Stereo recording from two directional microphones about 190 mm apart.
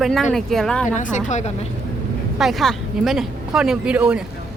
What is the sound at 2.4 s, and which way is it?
Speech, centre (ahead or behind).